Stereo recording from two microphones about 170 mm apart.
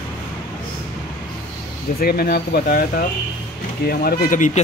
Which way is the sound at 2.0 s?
65° left (ahead or behind).